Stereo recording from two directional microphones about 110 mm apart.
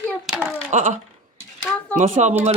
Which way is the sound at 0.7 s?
90° right.